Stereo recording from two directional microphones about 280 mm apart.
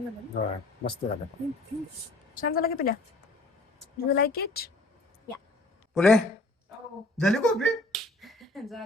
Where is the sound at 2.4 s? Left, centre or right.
Left.